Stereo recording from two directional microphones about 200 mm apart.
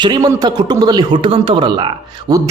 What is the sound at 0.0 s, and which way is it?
A man's voice, 20° right (ahead or behind).